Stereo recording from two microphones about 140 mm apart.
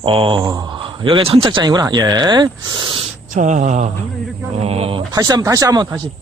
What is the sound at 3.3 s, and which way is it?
Mantra, 60° right (ahead or behind).